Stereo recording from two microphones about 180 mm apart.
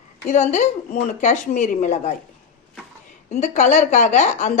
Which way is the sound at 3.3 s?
40° left (ahead or behind).